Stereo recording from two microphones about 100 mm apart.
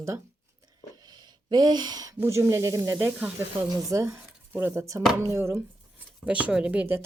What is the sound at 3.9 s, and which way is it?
Speech, 25° right (ahead or behind).